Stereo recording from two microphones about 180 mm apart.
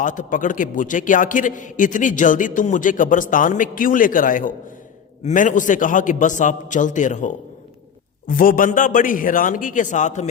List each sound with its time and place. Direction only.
0.0 s a man's voice: 45° left (ahead or behind)